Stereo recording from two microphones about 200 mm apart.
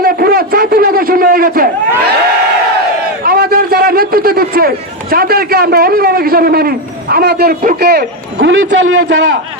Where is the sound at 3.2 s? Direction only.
50° right (ahead or behind).